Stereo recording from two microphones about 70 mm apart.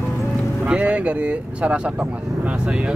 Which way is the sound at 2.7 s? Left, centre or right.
Centre.